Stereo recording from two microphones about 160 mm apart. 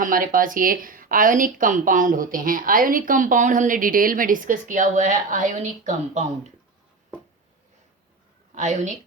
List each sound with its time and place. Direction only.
0.0 s speech: 55° right (ahead or behind)
8.5 s speech: 50° right (ahead or behind)